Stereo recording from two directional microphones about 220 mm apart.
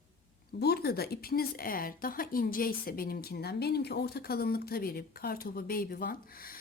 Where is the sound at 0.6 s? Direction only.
45° left (ahead or behind).